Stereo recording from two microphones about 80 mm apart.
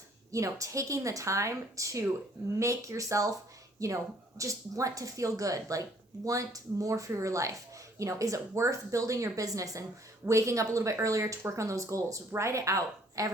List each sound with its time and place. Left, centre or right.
0.3 s speech: right